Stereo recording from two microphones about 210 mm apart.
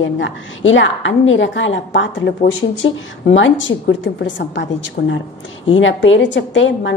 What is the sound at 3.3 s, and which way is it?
A woman's voice, 65° left (ahead or behind).